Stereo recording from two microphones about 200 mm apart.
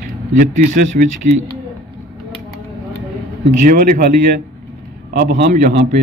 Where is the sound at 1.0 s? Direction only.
45° right (ahead or behind).